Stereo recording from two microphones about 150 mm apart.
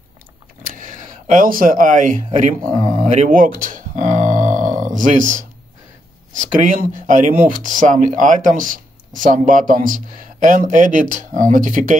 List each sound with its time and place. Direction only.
0.7 s a sound: 60° right (ahead or behind)
4.8 s speech: 60° right (ahead or behind)
6.3 s speech: 60° right (ahead or behind)